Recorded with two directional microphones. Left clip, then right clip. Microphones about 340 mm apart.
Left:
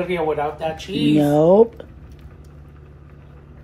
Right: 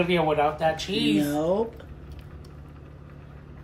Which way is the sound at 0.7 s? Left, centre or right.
Right.